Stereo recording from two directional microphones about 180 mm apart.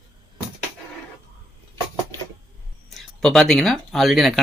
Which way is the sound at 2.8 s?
Centre (ahead or behind).